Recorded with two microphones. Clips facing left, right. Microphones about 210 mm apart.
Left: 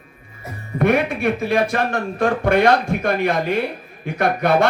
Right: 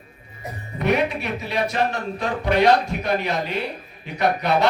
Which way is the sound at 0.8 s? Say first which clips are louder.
Left 4 dB; 50° left (ahead or behind).